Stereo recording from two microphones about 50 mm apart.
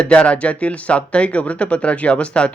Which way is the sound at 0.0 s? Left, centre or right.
Left.